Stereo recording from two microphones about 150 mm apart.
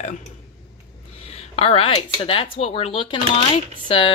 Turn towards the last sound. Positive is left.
turn(degrees=35)  # may be behind; listen again after turning